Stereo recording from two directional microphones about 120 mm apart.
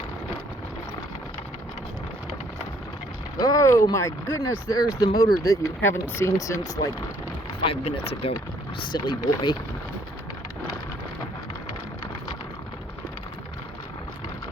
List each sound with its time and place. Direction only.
3.3 s speech: 30° left (ahead or behind)
7.6 s speech: 50° left (ahead or behind)
8.9 s speech: 40° left (ahead or behind)